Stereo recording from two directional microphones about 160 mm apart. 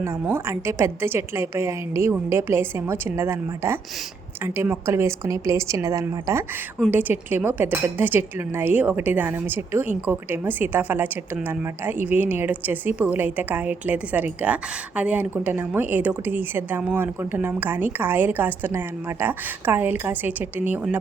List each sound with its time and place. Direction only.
0.0 s a woman's voice: 15° right (ahead or behind)